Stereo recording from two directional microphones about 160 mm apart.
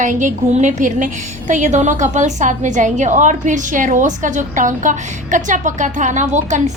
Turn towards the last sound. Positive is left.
turn(degrees=-50)  # may be behind; listen again after turning